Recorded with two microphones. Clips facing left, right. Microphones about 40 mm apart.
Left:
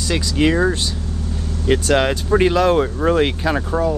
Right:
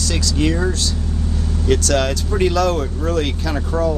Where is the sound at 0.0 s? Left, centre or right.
Left.